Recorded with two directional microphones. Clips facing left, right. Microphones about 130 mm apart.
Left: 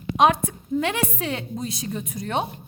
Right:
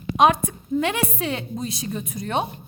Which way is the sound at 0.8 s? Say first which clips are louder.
Right 1 dB; 15° right (ahead or behind).